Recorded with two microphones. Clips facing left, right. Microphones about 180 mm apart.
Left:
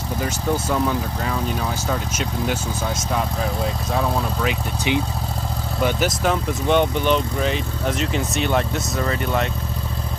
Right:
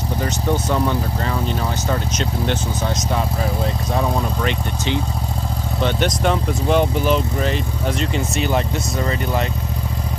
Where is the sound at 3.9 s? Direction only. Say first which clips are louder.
Right 1 dB; centre (ahead or behind).